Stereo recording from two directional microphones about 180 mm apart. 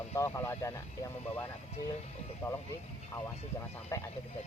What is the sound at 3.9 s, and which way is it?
Speech, 15° left (ahead or behind).